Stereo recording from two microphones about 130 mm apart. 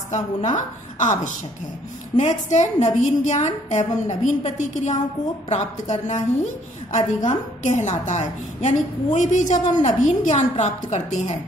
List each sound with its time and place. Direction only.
0.1 s a woman's voice: 65° left (ahead or behind)